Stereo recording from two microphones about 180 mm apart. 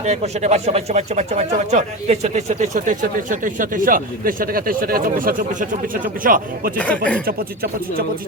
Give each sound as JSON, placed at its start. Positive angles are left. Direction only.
{"t": 0.0, "sound": "speech", "side_deg": -40}
{"t": 6.7, "sound": "speech", "side_deg": 10}
{"t": 7.3, "sound": "speech", "side_deg": -55}